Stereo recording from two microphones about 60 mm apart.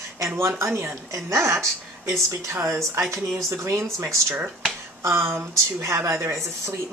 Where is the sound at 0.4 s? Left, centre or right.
Right.